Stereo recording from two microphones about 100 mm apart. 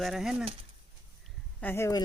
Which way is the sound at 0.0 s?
Centre (ahead or behind).